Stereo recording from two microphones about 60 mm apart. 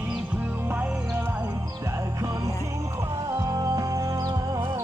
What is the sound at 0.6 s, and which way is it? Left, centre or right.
Music, right.